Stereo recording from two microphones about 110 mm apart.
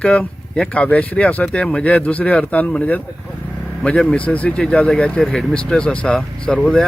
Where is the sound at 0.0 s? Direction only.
10° left (ahead or behind).